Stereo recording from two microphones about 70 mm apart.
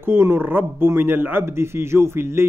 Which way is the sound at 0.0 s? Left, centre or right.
Right.